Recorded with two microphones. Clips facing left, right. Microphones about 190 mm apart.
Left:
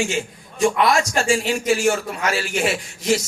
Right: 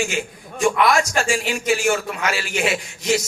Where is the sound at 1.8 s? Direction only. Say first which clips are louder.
Left 1 dB; 40° left (ahead or behind).